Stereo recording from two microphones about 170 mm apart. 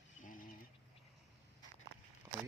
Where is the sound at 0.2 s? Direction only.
55° left (ahead or behind).